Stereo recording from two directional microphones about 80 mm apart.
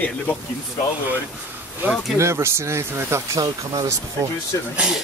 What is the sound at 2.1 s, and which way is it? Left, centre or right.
Speech, right.